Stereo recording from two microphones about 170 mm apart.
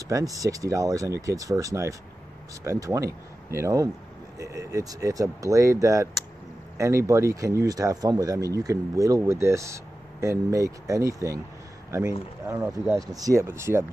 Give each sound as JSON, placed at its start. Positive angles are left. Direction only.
{"t": 0.1, "sound": "speech", "side_deg": -20}
{"t": 13.0, "sound": "speech", "side_deg": -20}